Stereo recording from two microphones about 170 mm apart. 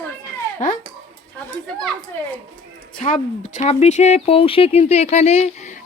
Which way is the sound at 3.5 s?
45° left (ahead or behind).